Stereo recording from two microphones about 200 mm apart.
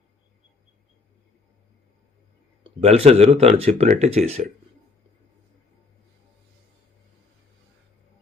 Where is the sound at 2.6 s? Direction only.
30° right (ahead or behind).